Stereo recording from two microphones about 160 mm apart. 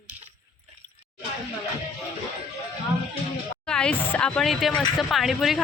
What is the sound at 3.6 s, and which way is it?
Speech, 5° left (ahead or behind).